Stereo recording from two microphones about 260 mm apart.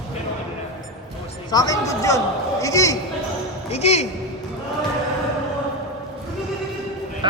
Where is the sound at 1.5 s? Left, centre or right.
Centre.